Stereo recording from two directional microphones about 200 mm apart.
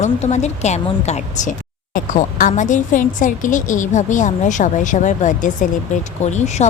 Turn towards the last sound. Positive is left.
turn(degrees=35)  # may be behind; listen again after turning